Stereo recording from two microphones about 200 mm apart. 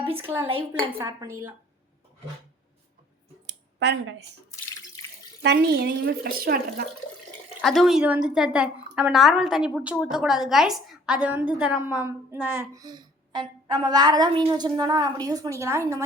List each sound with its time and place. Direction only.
0.9 s speech: 15° right (ahead or behind)
3.4 s a sound: 60° right (ahead or behind)
5.4 s speech: 55° right (ahead or behind)
7.6 s a woman's voice: centre (ahead or behind)